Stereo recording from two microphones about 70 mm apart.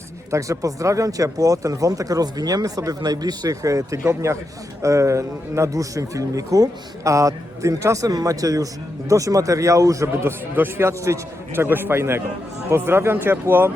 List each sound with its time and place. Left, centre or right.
0.3 s speech: right
4.0 s a man's voice: right
8.0 s a man's voice: right
10.2 s a man's voice: right